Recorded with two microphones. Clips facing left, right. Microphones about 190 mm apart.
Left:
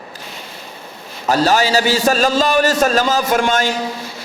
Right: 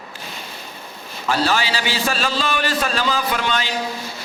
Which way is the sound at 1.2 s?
40° left (ahead or behind).